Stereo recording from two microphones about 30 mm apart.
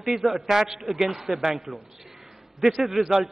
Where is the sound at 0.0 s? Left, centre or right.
Centre.